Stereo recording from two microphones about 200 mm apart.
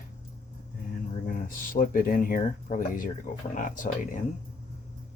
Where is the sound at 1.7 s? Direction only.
45° left (ahead or behind).